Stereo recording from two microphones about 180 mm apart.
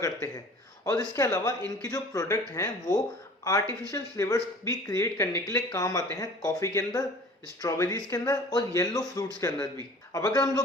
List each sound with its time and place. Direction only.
0.9 s speech: 15° left (ahead or behind)